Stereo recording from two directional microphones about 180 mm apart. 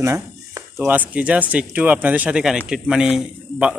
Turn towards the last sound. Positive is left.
turn(degrees=-5)  # may be behind; listen again after turning